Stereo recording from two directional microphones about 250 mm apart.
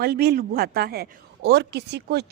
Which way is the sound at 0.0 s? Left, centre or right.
Right.